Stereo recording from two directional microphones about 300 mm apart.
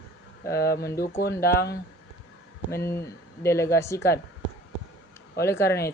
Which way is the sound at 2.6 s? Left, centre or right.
Centre.